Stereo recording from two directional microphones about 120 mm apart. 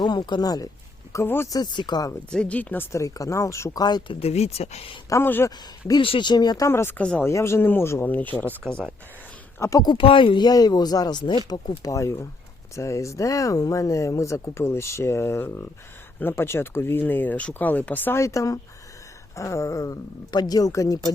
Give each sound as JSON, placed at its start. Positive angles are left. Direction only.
{"t": 0.0, "sound": "speech", "side_deg": 35}
{"t": 1.1, "sound": "speech", "side_deg": 20}
{"t": 1.5, "sound": "speech", "side_deg": 40}
{"t": 2.3, "sound": "speech", "side_deg": 10}
{"t": 4.2, "sound": "speech", "side_deg": 60}
{"t": 5.0, "sound": "speech", "side_deg": 20}
{"t": 5.5, "sound": "speech", "side_deg": 35}
{"t": 6.7, "sound": "speech", "side_deg": 20}
{"t": 9.6, "sound": "speech", "side_deg": 30}